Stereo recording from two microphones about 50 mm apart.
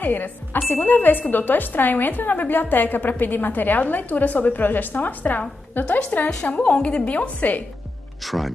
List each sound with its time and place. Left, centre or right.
0.0 s a woman's voice: left
8.2 s speech: centre